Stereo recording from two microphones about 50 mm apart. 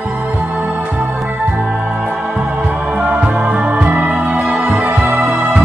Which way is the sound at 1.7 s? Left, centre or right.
Right.